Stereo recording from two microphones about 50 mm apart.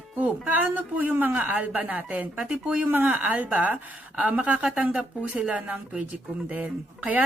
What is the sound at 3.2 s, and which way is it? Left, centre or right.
A man's voice, right.